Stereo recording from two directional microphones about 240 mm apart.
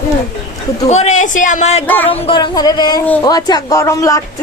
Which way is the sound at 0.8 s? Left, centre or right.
Left.